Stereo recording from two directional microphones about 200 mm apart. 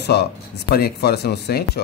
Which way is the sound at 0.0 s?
55° left (ahead or behind).